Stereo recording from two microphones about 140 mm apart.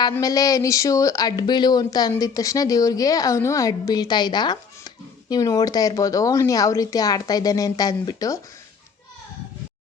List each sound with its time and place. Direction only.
0.2 s speech: 25° left (ahead or behind)